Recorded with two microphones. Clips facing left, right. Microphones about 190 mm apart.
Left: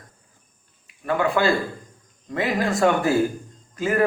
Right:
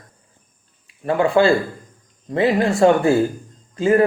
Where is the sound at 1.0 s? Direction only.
30° right (ahead or behind).